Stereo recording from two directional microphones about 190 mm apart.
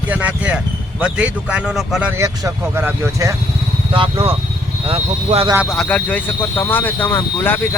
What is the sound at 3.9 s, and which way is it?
Speech, 30° right (ahead or behind).